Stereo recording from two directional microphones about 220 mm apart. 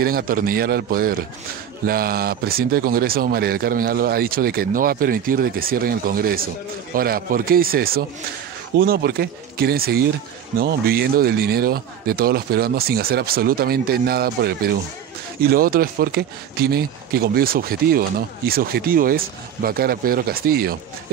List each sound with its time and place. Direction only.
0.0 s a man's voice: 40° right (ahead or behind)